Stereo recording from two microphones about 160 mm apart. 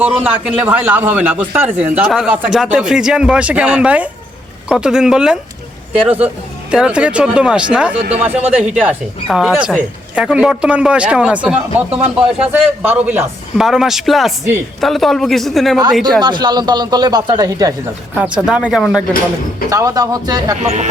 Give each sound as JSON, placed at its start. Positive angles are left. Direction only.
{"t": 0.0, "sound": "speech", "side_deg": -5}
{"t": 13.6, "sound": "speech", "side_deg": -5}
{"t": 16.2, "sound": "speech", "side_deg": -25}
{"t": 18.3, "sound": "speech", "side_deg": -5}
{"t": 19.7, "sound": "speech", "side_deg": -20}